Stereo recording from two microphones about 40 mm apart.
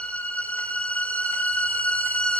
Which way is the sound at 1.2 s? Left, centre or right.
Left.